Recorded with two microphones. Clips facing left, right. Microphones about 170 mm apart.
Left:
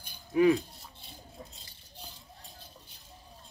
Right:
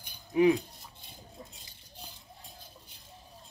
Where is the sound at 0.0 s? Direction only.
15° right (ahead or behind).